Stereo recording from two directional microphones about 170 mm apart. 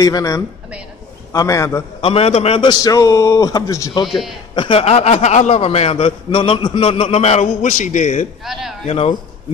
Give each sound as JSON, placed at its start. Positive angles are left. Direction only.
{"t": 0.0, "sound": "a man's voice", "side_deg": 20}
{"t": 2.0, "sound": "a man's voice", "side_deg": 35}
{"t": 4.1, "sound": "a man's voice", "side_deg": 0}
{"t": 4.6, "sound": "a man's voice", "side_deg": 30}
{"t": 8.5, "sound": "a man's voice", "side_deg": 0}
{"t": 8.8, "sound": "a man's voice", "side_deg": 35}